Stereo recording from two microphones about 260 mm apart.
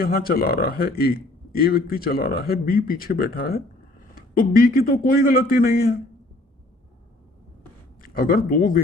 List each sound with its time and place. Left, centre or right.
0.0 s speech: left
8.0 s speech: left